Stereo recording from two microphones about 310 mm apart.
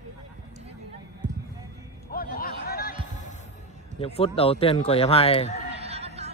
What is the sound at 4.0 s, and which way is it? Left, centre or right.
Speech, centre.